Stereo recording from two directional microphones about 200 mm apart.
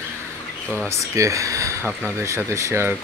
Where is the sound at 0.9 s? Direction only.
15° right (ahead or behind).